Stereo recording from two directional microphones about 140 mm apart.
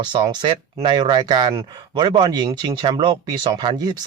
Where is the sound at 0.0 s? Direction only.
35° right (ahead or behind).